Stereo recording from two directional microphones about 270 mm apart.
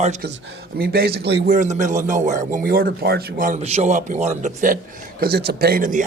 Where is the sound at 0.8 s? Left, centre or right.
Right.